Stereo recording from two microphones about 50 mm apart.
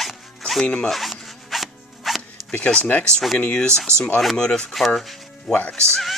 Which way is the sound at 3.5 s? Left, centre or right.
Left.